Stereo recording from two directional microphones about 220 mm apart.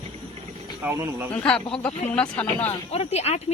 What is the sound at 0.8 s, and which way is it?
Speech, 10° right (ahead or behind).